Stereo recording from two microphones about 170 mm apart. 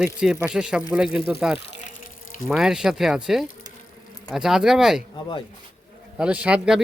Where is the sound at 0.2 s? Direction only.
5° right (ahead or behind).